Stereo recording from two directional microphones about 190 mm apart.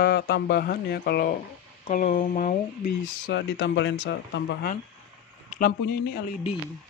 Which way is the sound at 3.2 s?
70° left (ahead or behind).